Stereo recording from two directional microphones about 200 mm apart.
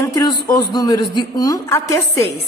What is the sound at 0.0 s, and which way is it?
A woman's voice, 20° left (ahead or behind).